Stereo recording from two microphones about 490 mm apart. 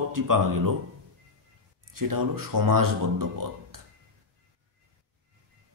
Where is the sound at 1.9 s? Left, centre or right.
Right.